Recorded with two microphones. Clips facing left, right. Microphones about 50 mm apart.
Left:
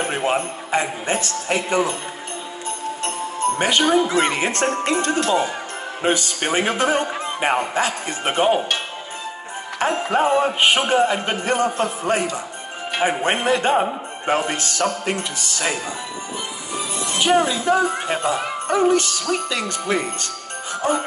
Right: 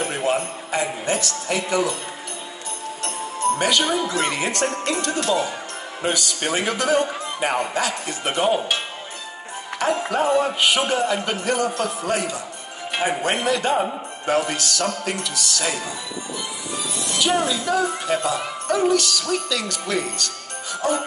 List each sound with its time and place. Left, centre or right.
0.0 s a man's voice: left
3.5 s a man's voice: left
9.8 s a man's voice: left